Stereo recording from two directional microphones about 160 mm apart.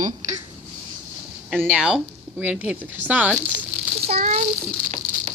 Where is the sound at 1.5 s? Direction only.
5° right (ahead or behind).